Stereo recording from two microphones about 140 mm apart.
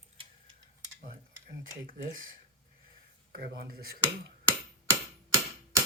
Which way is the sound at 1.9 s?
75° right (ahead or behind).